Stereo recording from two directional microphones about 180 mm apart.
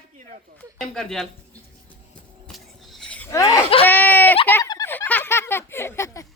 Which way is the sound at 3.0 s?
5° left (ahead or behind).